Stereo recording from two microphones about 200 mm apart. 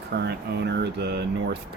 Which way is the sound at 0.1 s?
55° right (ahead or behind).